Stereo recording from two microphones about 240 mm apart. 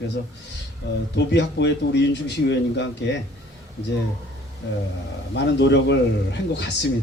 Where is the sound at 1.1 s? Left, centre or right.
Left.